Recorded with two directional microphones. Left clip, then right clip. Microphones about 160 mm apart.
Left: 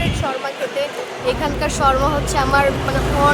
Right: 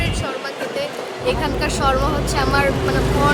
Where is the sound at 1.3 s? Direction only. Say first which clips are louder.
Even; 10° right (ahead or behind).